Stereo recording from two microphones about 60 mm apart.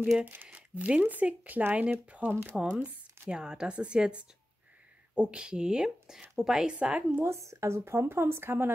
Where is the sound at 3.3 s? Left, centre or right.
Centre.